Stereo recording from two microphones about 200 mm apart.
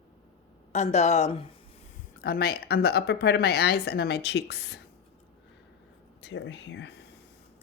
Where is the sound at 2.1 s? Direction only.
50° left (ahead or behind).